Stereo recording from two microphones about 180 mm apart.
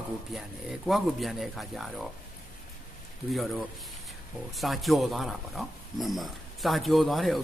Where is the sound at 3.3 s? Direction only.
Centre (ahead or behind).